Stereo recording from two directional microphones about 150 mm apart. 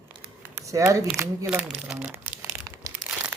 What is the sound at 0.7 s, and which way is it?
Speech, 20° right (ahead or behind).